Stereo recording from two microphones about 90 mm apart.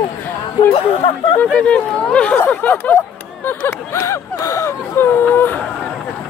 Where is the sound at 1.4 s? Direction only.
15° left (ahead or behind); by 4.7 s 35° left (ahead or behind).